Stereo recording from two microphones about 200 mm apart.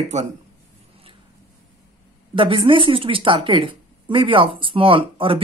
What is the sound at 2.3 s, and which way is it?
Speech, 25° right (ahead or behind).